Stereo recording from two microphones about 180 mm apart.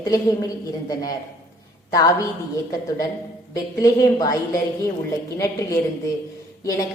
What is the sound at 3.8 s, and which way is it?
A woman's voice, 20° left (ahead or behind).